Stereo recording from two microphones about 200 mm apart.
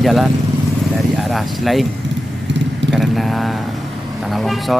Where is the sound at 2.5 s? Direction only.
65° right (ahead or behind).